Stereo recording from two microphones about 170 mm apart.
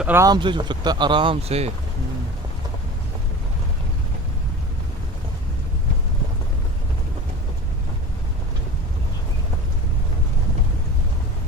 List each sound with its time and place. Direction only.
0.0 s speech: 15° right (ahead or behind); by 1.7 s 35° right (ahead or behind)